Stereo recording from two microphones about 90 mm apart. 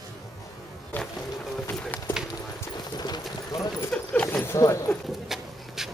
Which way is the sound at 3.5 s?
45° left (ahead or behind).